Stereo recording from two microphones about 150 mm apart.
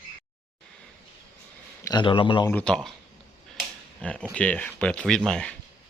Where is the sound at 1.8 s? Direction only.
30° left (ahead or behind).